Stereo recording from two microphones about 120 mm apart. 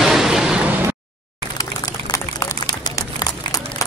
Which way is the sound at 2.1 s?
25° left (ahead or behind).